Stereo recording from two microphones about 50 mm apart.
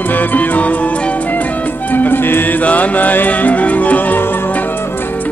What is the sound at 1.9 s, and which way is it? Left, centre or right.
Music, left.